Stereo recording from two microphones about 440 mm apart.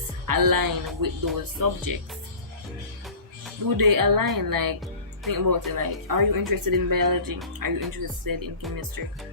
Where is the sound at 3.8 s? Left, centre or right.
Right.